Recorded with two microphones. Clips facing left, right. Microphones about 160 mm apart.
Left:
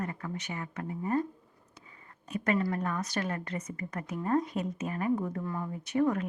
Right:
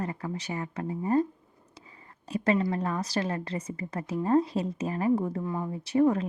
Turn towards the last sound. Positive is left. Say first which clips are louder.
# right 4 dB
turn(degrees=-30)  # may be behind; listen again after turning